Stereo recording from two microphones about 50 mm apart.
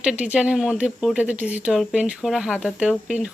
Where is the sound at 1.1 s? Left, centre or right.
Right.